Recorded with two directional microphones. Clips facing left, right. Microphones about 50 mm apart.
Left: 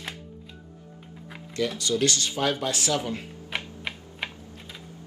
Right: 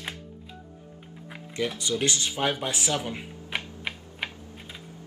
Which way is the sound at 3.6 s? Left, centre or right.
Centre.